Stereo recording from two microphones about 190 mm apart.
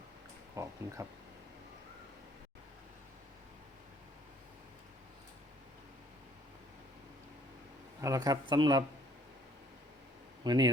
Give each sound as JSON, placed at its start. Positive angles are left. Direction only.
{"t": 0.5, "sound": "a sound", "side_deg": -15}
{"t": 8.0, "sound": "speech", "side_deg": -20}
{"t": 10.4, "sound": "speech", "side_deg": -20}